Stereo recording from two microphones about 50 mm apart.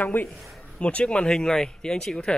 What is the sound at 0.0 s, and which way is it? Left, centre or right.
Speech, left.